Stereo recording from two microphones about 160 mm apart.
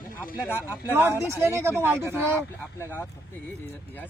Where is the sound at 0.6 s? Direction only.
10° right (ahead or behind).